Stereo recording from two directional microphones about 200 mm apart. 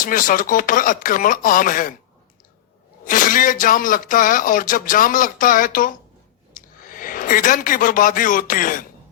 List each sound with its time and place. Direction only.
0.0 s speech: 45° left (ahead or behind)
3.0 s speech: 45° left (ahead or behind)